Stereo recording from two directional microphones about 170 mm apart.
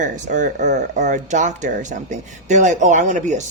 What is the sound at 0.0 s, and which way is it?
Speech, 45° right (ahead or behind).